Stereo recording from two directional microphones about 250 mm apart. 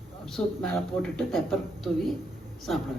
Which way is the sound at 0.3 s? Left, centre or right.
Centre.